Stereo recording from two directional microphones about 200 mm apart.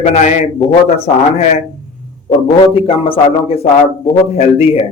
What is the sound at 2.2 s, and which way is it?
A man's voice, 30° left (ahead or behind).